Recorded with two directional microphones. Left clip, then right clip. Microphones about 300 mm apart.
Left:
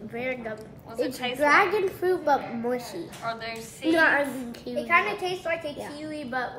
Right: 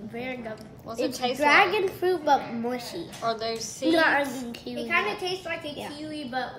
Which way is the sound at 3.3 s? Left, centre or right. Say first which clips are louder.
Right 5 dB; centre.